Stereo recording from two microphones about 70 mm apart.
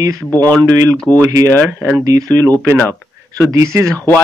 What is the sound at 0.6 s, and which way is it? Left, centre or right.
Speech, right.